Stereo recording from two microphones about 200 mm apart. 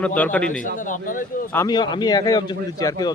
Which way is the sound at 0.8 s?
40° left (ahead or behind).